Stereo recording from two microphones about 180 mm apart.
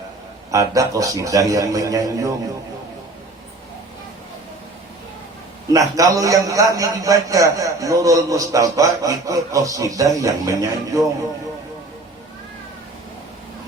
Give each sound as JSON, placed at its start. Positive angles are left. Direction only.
{"t": 0.5, "sound": "a man's voice", "side_deg": -20}
{"t": 6.0, "sound": "a man's voice", "side_deg": -20}